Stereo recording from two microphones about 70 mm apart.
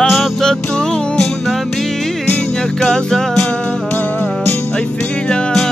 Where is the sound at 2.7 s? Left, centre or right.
Centre.